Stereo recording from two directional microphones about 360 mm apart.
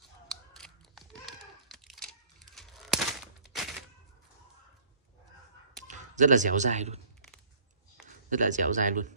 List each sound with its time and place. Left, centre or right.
0.3 s a sound: centre
5.9 s speech: right
8.3 s speech: right